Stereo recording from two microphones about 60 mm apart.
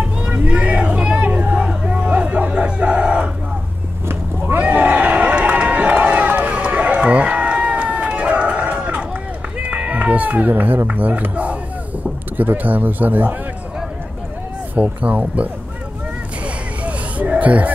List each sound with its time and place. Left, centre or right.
0.4 s vehicle: right
4.6 s run: right
9.7 s cat: right
10.9 s speech: right
14.8 s speech: right
16.8 s a sound: right